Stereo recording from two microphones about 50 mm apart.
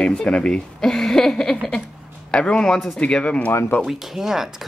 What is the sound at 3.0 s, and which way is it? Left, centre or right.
Speech, left.